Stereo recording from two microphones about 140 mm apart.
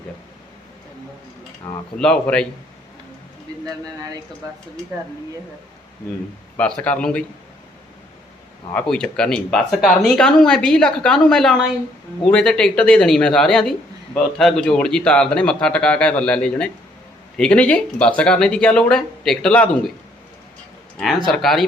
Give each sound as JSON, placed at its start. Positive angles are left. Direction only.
{"t": 2.0, "sound": "speech", "side_deg": 5}
{"t": 3.5, "sound": "a sound", "side_deg": -25}
{"t": 6.6, "sound": "speech", "side_deg": 10}
{"t": 8.7, "sound": "speech", "side_deg": 5}
{"t": 21.2, "sound": "speech", "side_deg": 0}